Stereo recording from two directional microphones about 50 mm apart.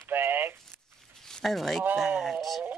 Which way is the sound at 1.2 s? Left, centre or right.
Centre.